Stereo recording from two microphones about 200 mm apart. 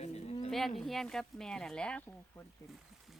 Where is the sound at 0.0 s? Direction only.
35° left (ahead or behind).